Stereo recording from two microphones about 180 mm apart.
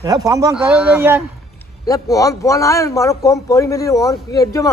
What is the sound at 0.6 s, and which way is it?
Speech, 5° right (ahead or behind).